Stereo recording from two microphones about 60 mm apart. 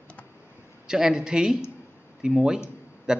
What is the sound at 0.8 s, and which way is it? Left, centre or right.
A man's voice, centre.